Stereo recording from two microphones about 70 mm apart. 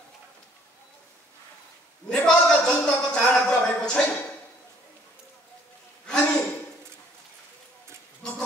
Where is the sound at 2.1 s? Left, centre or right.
Centre.